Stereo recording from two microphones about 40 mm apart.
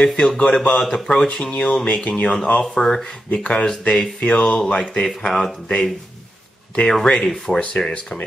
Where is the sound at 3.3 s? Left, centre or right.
Left.